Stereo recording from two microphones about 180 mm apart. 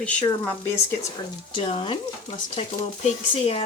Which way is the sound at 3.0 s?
35° left (ahead or behind).